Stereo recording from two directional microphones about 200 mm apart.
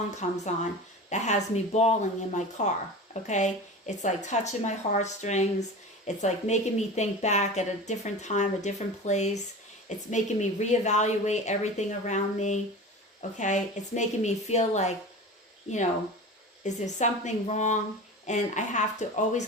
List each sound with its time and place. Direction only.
0.2 s speech: 35° left (ahead or behind)
16.6 s speech: 35° left (ahead or behind)